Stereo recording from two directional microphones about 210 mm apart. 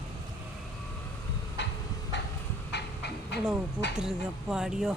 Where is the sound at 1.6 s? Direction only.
55° left (ahead or behind).